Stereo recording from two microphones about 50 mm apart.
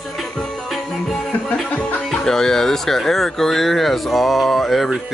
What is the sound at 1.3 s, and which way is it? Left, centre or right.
Music, centre.